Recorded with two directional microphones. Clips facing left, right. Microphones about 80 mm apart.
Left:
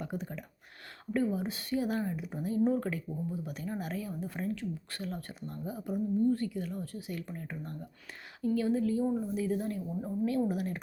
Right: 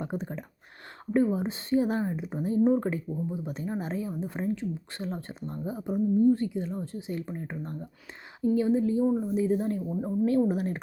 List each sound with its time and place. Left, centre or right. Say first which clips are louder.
0.0 s speech: right 5 dB; right